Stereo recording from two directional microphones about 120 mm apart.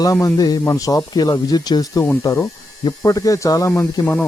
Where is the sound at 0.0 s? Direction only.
25° left (ahead or behind).